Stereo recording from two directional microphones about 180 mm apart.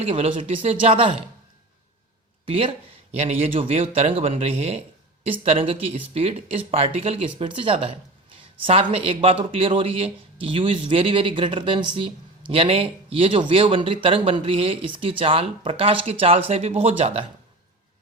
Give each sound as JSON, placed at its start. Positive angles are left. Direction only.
{"t": 0.0, "sound": "speech", "side_deg": -30}
{"t": 2.5, "sound": "speech", "side_deg": -30}